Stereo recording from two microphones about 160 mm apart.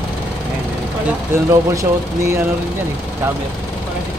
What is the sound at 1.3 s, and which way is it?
Speech, 15° right (ahead or behind).